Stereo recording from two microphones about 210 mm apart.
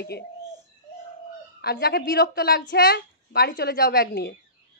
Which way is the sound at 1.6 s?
50° left (ahead or behind).